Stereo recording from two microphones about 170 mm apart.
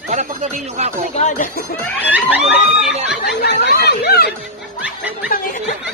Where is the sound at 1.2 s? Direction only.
45° left (ahead or behind).